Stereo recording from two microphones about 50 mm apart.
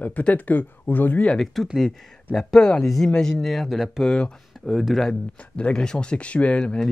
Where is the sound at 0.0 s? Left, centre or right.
Left.